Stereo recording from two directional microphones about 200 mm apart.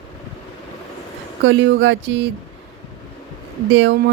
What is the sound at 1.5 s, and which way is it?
Speech, 65° right (ahead or behind).